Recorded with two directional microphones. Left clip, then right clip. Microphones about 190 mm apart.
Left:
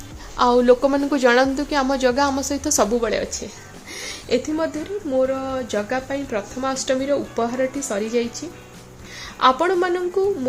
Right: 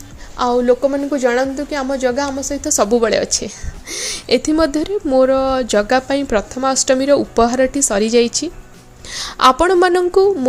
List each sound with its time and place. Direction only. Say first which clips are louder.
0.3 s a woman's voice: right 1 dB; centre (ahead or behind)
2.7 s a woman's voice: right 6 dB; 25° right (ahead or behind)